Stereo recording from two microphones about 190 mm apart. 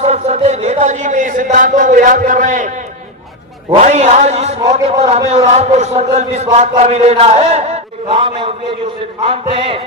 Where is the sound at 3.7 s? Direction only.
35° right (ahead or behind).